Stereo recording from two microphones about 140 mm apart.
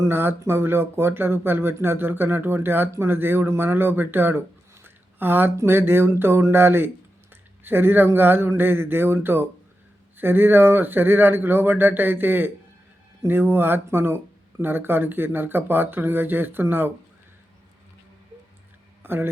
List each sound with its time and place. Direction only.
0.0 s speech: 15° right (ahead or behind)
19.0 s speech: 15° right (ahead or behind)